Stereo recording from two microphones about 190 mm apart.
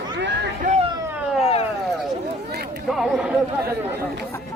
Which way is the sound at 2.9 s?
Centre (ahead or behind).